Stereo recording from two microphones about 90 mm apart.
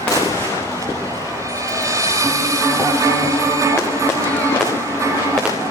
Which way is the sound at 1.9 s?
35° right (ahead or behind).